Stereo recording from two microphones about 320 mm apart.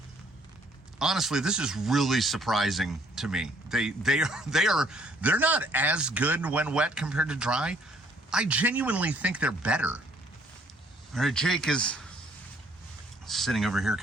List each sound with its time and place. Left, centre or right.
0.9 s speech: centre
11.1 s speech: centre
13.2 s speech: centre